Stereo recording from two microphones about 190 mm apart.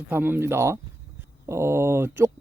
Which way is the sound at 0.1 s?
10° right (ahead or behind).